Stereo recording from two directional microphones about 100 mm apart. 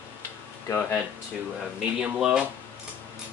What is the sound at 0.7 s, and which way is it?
Speech, 30° left (ahead or behind).